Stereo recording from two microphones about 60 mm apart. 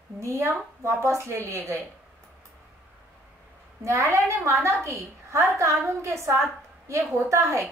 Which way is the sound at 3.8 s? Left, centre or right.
Right.